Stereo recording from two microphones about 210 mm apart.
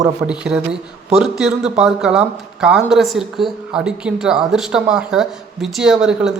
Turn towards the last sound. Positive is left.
turn(degrees=-5)  # may be behind; listen again after turning